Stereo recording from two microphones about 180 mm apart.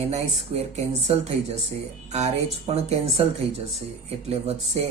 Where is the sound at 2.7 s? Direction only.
35° right (ahead or behind).